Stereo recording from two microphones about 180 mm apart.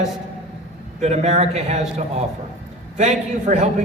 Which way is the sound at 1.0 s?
40° right (ahead or behind).